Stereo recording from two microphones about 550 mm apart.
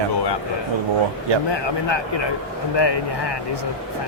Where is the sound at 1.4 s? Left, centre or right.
Left.